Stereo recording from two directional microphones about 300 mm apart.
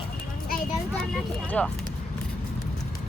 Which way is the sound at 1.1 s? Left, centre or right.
Centre.